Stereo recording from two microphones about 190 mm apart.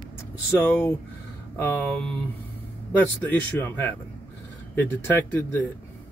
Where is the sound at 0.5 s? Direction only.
10° left (ahead or behind).